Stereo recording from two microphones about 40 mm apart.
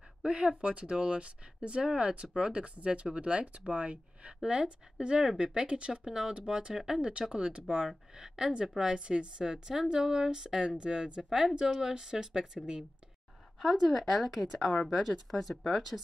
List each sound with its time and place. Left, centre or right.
0.2 s speech: right
8.2 s speech: centre
8.8 s speech: right
11.2 s speech: centre
13.6 s speech: centre